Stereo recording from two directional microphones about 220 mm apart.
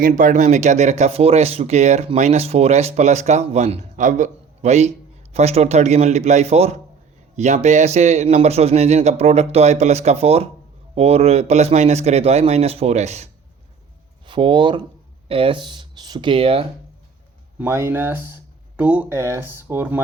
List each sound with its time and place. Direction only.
0.0 s a man's voice: 35° right (ahead or behind)
14.3 s a man's voice: 20° right (ahead or behind)
17.6 s speech: 10° right (ahead or behind)